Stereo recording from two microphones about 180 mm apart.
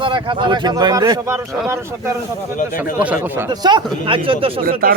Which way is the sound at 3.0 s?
10° right (ahead or behind).